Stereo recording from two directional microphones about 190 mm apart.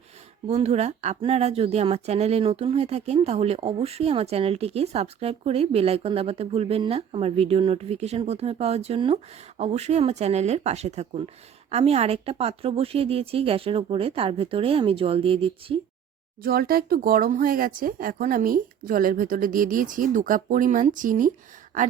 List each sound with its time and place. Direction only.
0.4 s a woman's voice: 35° right (ahead or behind)
16.4 s speech: 50° right (ahead or behind)